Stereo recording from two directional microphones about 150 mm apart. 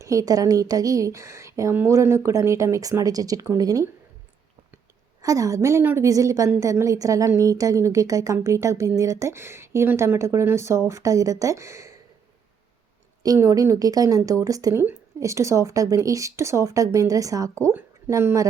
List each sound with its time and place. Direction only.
0.0 s a woman's voice: 20° right (ahead or behind)
5.2 s a woman's voice: 20° right (ahead or behind)
13.2 s a woman's voice: 25° right (ahead or behind)